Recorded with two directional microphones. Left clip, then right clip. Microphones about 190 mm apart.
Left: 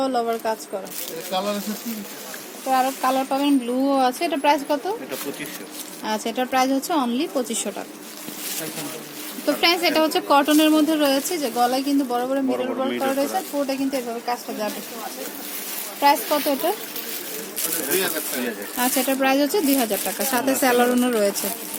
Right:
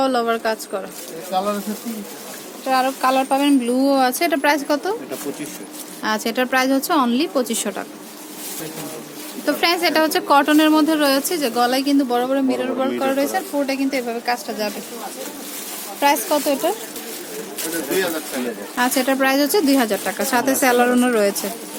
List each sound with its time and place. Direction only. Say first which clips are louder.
0.0 s speech: right 4 dB; 5° right (ahead or behind)
1.3 s speech: right 4 dB; 25° left (ahead or behind)
2.6 s speech: right 3 dB; centre (ahead or behind)
6.0 s speech: right 4 dB; 5° right (ahead or behind)
9.5 s speech: right 1 dB; centre (ahead or behind)
13.1 s speech: right 3 dB; 5° left (ahead or behind)
16.0 s speech: right 1 dB; 5° left (ahead or behind)
17.9 s speech: right 3 dB; 50° left (ahead or behind)
18.8 s speech: right 4 dB; centre (ahead or behind)